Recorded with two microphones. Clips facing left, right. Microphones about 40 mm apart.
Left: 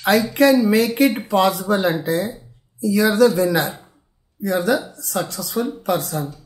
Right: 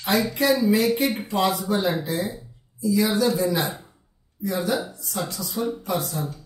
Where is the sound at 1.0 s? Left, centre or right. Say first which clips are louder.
Left 6 dB; left.